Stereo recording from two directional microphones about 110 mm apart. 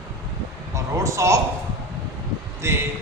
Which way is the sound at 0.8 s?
30° right (ahead or behind).